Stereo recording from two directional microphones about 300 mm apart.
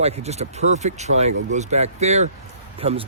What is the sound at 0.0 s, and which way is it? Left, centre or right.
Speech, right.